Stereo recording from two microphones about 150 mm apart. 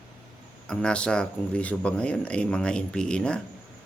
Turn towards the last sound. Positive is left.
turn(degrees=5)  # may be behind; listen again after turning